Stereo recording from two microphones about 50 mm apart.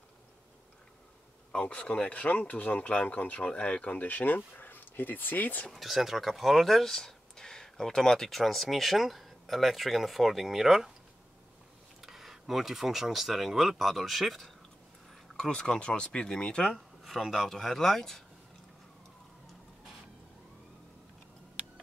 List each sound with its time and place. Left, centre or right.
1.5 s speech: left
5.7 s speech: centre
12.0 s speech: centre
15.3 s speech: centre
16.7 s speech: centre